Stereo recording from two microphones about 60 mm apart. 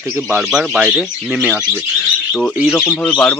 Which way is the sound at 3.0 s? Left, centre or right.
Centre.